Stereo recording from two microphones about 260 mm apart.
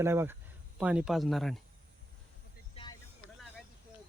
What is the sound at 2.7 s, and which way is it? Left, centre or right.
Vehicle, centre.